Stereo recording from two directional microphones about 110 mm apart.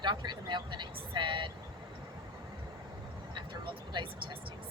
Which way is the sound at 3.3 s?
45° right (ahead or behind).